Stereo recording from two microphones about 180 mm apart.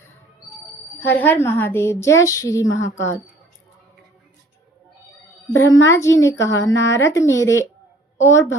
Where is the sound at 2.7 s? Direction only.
90° left.